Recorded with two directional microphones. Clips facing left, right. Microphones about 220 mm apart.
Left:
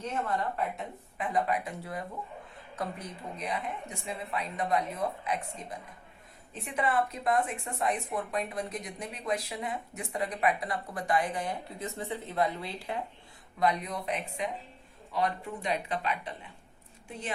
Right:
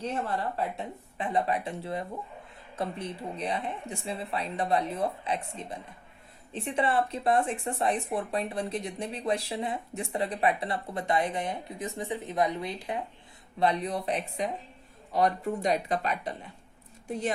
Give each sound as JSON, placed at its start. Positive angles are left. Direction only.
{"t": 0.0, "sound": "speech", "side_deg": -30}
{"t": 6.5, "sound": "speech", "side_deg": -30}
{"t": 13.6, "sound": "speech", "side_deg": -30}